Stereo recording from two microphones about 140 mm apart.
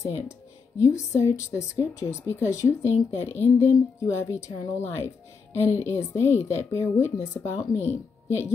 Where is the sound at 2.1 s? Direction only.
20° left (ahead or behind).